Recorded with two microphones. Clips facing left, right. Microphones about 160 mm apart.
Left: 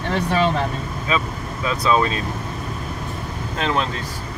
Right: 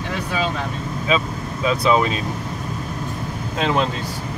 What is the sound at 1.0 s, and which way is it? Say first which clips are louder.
Speech: right 3 dB; 20° right (ahead or behind).